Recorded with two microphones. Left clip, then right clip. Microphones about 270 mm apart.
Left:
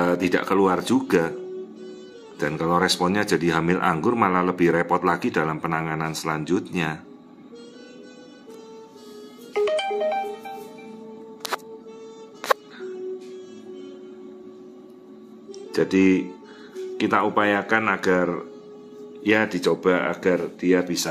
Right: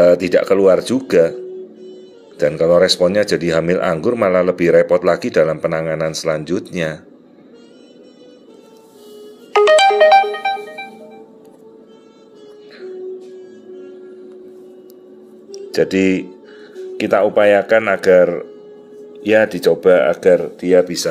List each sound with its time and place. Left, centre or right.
0.0 s speech: centre
2.3 s speech: centre
9.5 s ringtone: right
15.5 s speech: centre